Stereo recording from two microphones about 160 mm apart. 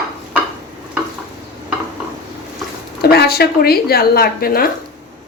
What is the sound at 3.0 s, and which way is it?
A woman's voice, 75° left (ahead or behind).